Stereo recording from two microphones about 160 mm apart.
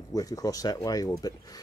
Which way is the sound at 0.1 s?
20° left (ahead or behind).